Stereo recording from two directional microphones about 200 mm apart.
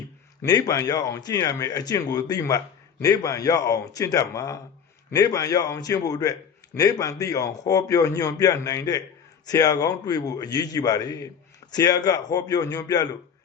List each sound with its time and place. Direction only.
0.4 s a man's voice: 20° left (ahead or behind)